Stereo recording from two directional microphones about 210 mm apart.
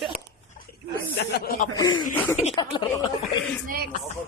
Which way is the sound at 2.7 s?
20° left (ahead or behind).